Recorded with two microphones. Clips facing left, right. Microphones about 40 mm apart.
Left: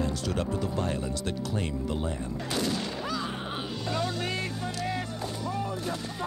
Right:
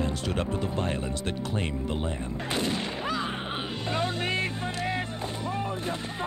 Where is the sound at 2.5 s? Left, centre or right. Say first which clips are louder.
Right 1 dB; right.